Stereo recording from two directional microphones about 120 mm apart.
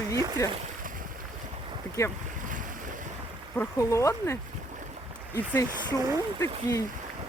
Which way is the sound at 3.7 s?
25° left (ahead or behind).